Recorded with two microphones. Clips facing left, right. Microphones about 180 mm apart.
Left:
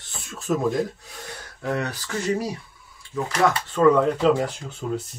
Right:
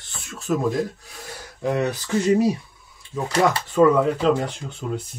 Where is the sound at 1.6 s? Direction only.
20° right (ahead or behind).